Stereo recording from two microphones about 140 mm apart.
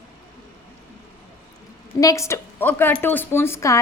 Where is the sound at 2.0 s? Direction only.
25° left (ahead or behind).